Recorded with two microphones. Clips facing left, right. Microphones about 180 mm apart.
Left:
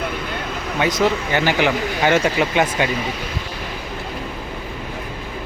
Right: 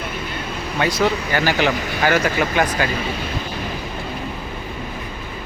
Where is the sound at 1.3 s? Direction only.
20° left (ahead or behind).